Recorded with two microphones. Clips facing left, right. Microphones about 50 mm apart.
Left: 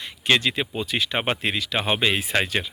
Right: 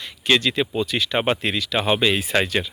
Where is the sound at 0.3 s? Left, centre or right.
Left.